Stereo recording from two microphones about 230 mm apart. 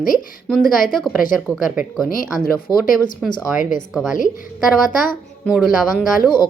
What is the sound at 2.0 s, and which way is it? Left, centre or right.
Speech, left.